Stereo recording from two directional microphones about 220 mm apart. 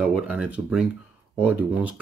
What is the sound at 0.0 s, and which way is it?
Speech, 5° right (ahead or behind).